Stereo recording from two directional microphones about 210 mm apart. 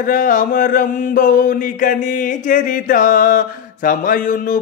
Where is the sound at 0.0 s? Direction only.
40° left (ahead or behind).